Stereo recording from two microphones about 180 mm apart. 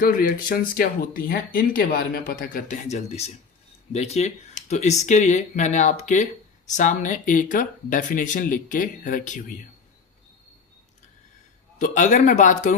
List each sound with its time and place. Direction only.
0.0 s speech: 50° left (ahead or behind)
11.8 s speech: 45° left (ahead or behind)